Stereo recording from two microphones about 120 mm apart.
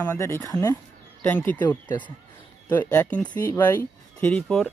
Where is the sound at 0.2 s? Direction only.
25° left (ahead or behind).